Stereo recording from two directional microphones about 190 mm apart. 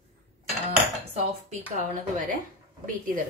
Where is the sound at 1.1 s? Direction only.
35° right (ahead or behind).